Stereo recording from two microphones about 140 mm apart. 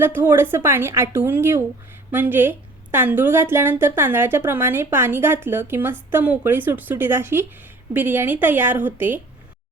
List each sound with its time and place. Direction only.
0.0 s a woman's voice: 15° right (ahead or behind)